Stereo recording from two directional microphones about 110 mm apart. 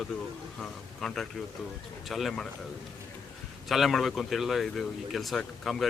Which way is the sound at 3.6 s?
Centre (ahead or behind).